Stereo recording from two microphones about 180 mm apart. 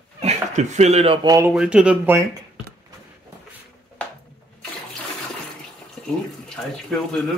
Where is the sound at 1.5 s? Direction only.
5° right (ahead or behind).